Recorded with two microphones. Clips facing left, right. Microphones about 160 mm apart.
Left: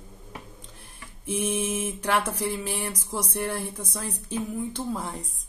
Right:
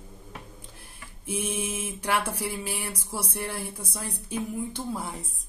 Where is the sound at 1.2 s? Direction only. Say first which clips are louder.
Left 4 dB; 10° right (ahead or behind).